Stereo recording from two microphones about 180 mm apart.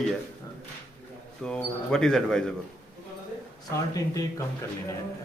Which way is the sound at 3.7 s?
15° left (ahead or behind).